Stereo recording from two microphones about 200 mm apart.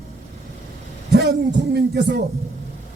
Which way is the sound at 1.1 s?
55° right (ahead or behind).